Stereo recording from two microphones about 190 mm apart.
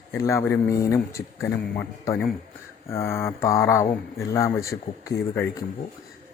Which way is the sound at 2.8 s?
15° left (ahead or behind).